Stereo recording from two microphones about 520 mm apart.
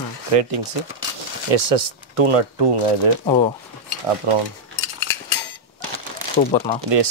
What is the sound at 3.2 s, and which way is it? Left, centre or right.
Speech, centre.